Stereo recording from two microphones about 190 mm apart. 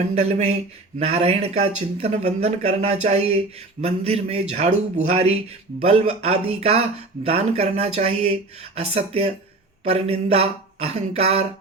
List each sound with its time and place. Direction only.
0.1 s speech: 35° right (ahead or behind)